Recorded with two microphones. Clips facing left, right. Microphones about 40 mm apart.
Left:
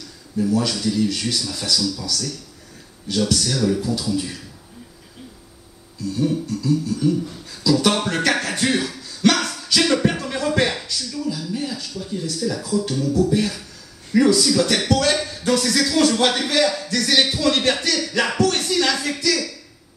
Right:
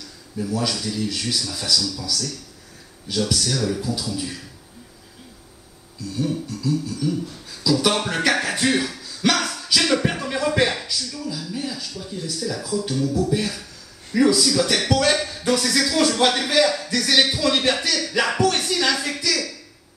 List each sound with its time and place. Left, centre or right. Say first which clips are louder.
0.4 s speech: left 4 dB; centre
3.3 s speech: left 4 dB; centre
6.1 s speech: left 3 dB; centre
7.0 s beatboxing: left 4 dB; centre
7.6 s speech: left 2 dB; centre
14.9 s speech: even; centre